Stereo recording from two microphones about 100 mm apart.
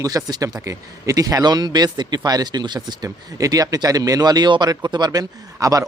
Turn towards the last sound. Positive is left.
turn(degrees=-35)  # may be behind; listen again after turning